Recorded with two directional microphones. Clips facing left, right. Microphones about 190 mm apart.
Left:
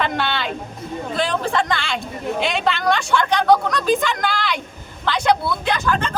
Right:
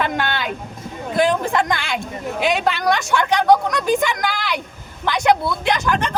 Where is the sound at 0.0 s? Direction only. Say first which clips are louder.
Even; 10° right (ahead or behind).